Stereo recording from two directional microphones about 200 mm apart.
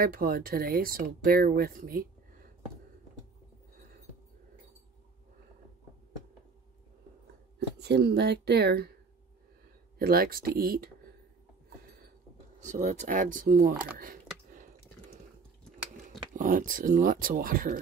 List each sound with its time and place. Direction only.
0.0 s speech: 45° right (ahead or behind)
7.5 s speech: 55° right (ahead or behind)
9.9 s speech: 50° right (ahead or behind)
12.5 s speech: 35° right (ahead or behind)
13.9 s a sound: 45° right (ahead or behind)
16.3 s speech: 45° right (ahead or behind)